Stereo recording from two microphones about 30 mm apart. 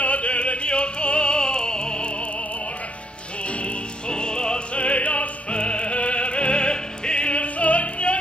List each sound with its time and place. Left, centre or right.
0.0 s music: left
4.1 s opera: left
4.7 s opera: left
7.5 s music: left